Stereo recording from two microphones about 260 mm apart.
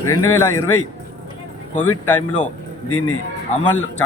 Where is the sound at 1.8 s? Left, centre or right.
Left.